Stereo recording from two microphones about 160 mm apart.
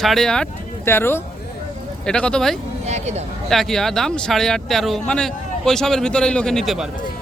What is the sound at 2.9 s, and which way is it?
Speech, 40° right (ahead or behind).